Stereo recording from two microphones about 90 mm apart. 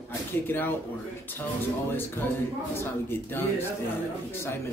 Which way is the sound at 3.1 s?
25° left (ahead or behind).